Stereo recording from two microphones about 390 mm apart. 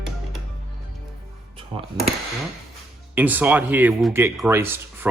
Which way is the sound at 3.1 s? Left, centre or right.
Centre.